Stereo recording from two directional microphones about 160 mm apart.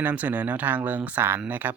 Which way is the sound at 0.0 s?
10° right (ahead or behind).